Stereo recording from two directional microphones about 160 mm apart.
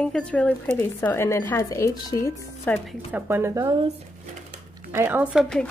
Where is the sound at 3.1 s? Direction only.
15° right (ahead or behind).